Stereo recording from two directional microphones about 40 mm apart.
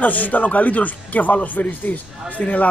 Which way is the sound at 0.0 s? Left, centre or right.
Left.